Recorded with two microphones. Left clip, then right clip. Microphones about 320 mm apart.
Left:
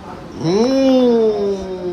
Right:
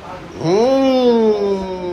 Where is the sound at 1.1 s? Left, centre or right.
Right.